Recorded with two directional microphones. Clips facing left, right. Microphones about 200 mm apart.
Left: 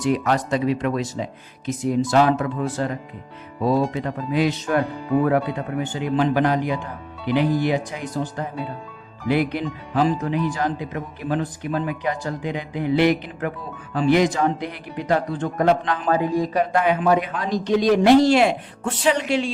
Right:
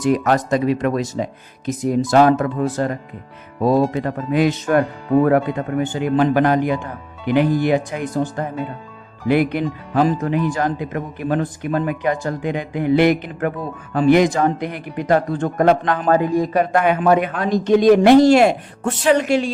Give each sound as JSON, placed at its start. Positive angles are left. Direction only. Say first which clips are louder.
{"t": 0.0, "sound": "speech", "louder": "right 4 dB", "side_deg": -45}